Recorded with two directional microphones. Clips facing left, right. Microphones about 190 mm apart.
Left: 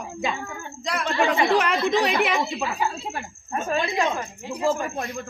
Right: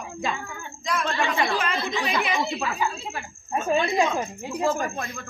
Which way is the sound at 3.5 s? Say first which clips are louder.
Right 2 dB; 10° right (ahead or behind).